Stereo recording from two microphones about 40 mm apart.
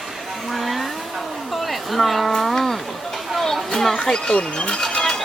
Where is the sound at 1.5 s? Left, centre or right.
Centre.